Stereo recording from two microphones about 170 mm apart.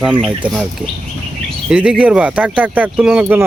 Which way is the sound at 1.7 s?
5° right (ahead or behind).